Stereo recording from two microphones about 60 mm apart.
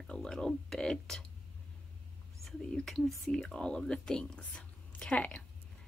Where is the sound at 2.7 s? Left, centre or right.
Centre.